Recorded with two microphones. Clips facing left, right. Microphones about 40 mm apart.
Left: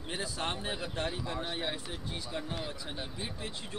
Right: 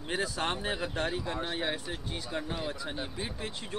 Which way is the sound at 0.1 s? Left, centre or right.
Right.